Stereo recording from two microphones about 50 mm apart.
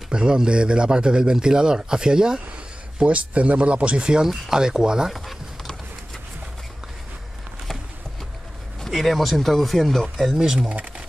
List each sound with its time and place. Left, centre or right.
0.1 s a man's voice: centre
5.1 s typing: centre
8.8 s speech: centre
10.3 s a man's voice: centre